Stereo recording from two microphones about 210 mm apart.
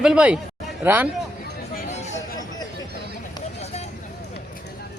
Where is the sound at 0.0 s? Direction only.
5° right (ahead or behind).